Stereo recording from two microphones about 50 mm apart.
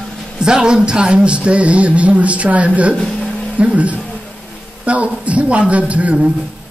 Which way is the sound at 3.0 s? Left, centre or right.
Centre.